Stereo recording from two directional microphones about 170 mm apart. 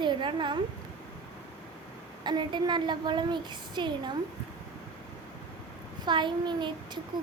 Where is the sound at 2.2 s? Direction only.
25° right (ahead or behind).